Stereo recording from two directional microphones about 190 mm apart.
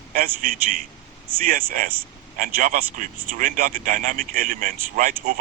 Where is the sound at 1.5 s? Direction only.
45° right (ahead or behind).